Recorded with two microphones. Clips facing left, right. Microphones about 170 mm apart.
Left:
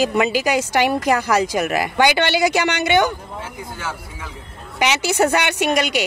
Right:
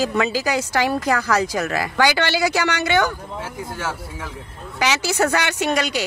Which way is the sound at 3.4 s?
5° right (ahead or behind).